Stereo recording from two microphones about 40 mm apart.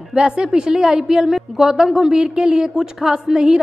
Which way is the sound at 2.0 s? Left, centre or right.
Right.